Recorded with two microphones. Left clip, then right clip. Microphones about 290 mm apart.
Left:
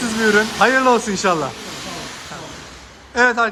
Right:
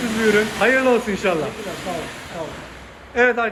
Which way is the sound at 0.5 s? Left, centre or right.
Centre.